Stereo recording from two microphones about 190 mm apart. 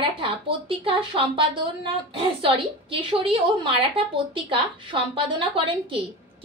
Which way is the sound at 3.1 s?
25° right (ahead or behind).